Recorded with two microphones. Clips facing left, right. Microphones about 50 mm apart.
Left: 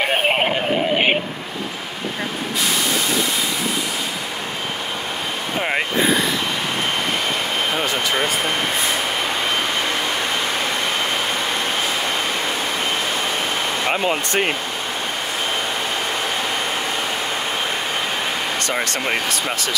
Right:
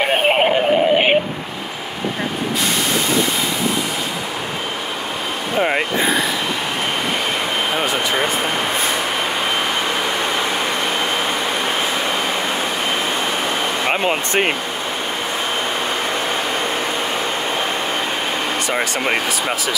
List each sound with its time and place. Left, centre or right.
0.0 s synthetic singing: centre
5.6 s vehicle: centre
13.8 s speech: right
18.7 s speech: centre